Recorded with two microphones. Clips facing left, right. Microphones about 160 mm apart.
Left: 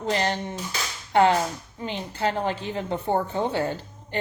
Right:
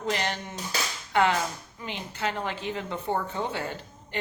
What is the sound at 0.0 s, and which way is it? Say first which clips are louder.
A woman's voice: left 4 dB; 35° left (ahead or behind).